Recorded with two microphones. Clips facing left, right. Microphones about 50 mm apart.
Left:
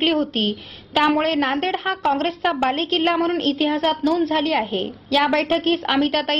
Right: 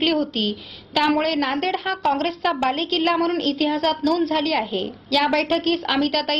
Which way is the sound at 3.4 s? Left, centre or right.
Left.